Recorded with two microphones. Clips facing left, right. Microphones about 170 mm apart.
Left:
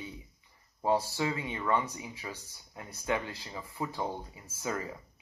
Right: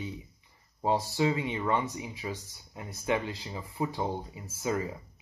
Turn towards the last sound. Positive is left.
turn(degrees=-20)  # may be behind; listen again after turning